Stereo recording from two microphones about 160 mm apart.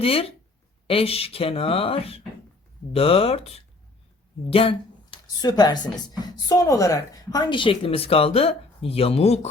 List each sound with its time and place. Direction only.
0.0 s speech: 35° left (ahead or behind)
5.4 s speech: 25° left (ahead or behind); by 9.5 s 40° left (ahead or behind)